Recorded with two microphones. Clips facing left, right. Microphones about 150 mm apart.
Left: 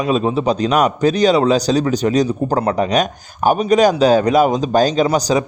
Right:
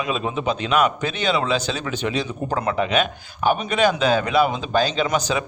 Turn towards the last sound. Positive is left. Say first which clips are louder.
# left 7 dB
turn(degrees=35)  # may be behind; listen again after turning